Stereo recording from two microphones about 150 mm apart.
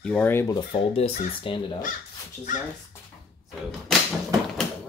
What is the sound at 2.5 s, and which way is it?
Speech, 60° left (ahead or behind).